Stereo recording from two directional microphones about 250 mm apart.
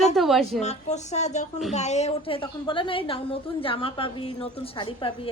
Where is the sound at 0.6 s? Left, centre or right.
Left.